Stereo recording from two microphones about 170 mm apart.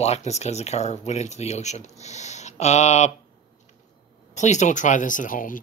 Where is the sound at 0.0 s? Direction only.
40° left (ahead or behind).